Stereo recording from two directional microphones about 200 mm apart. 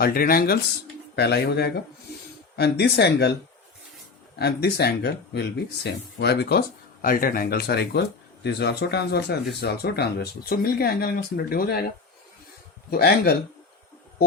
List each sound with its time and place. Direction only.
0.0 s speech: 45° left (ahead or behind)
4.4 s speech: 55° left (ahead or behind)
12.9 s speech: 50° left (ahead or behind)